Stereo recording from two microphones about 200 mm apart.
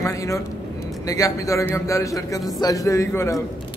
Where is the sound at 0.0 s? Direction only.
15° left (ahead or behind).